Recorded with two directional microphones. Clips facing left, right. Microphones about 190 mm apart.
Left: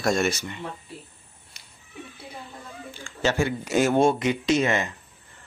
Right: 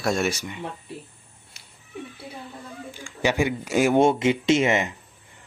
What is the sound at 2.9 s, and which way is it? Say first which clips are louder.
Speech: right 1 dB; 15° right (ahead or behind).